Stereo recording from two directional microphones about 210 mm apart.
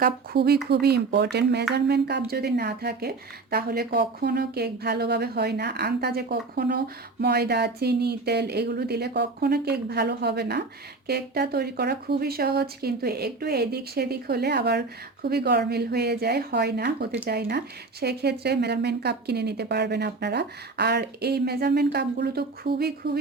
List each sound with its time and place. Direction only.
0.0 s a woman's voice: 50° right (ahead or behind)